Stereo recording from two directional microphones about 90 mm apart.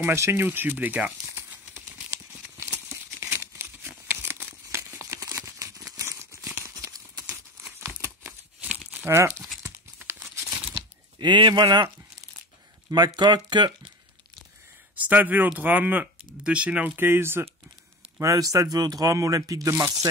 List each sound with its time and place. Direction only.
0.0 s speech: 30° right (ahead or behind)
1.5 s crumpling: 20° right (ahead or behind)
2.9 s crumpling: 25° right (ahead or behind)
6.6 s horse: 40° right (ahead or behind)
7.8 s crumpling: 25° right (ahead or behind)
9.0 s speech: 30° right (ahead or behind)
10.3 s tearing: 30° right (ahead or behind)
10.7 s a sound: 55° right (ahead or behind)
12.9 s speech: 55° right (ahead or behind)
15.0 s speech: 20° right (ahead or behind)
18.2 s speech: 40° right (ahead or behind)